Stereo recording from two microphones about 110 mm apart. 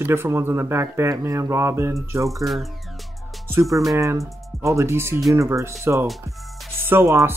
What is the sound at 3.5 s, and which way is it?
Speech, 25° right (ahead or behind).